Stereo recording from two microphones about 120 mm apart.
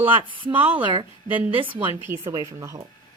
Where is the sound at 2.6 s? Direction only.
30° right (ahead or behind).